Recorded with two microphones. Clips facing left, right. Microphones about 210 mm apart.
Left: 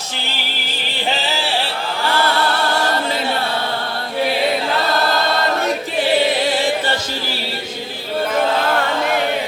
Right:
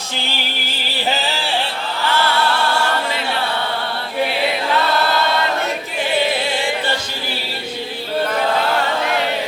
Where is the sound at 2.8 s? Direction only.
40° left (ahead or behind).